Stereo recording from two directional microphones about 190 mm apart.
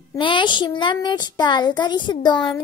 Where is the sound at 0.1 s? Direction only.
25° left (ahead or behind).